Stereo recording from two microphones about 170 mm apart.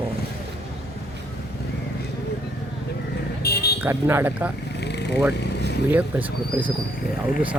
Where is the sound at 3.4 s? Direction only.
70° left (ahead or behind).